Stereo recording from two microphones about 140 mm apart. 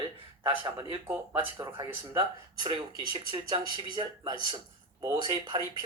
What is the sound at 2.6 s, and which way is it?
Speech, 35° right (ahead or behind).